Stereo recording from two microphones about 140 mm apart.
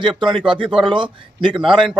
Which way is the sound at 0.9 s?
35° right (ahead or behind).